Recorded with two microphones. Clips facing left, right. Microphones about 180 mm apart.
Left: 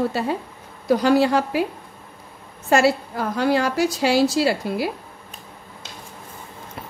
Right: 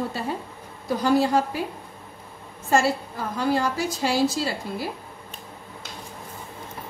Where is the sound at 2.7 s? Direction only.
75° left (ahead or behind).